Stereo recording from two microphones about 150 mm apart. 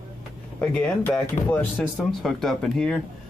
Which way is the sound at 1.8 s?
Centre (ahead or behind).